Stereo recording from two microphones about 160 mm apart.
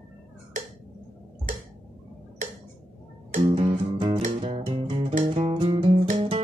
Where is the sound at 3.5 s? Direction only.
30° right (ahead or behind).